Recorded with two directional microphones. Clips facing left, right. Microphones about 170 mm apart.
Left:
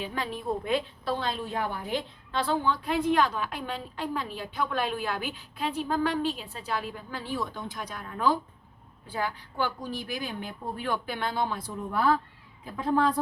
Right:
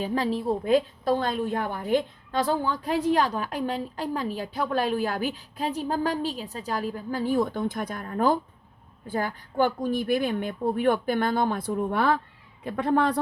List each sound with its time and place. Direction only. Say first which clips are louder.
0.0 s a woman's voice: right 7 dB; 35° right (ahead or behind); by 11.7 s 50° right (ahead or behind)
11.9 s a man's voice: left 1 dB; 75° right (ahead or behind)